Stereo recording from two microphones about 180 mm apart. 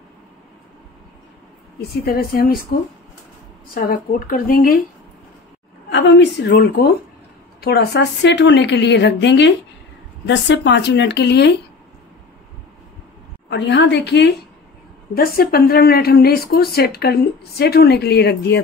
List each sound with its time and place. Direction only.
1.8 s speech: 60° left (ahead or behind)
3.7 s speech: 55° left (ahead or behind)
5.9 s a woman's voice: 80° left
13.5 s a woman's voice: 75° left (ahead or behind)
15.1 s speech: 55° left (ahead or behind)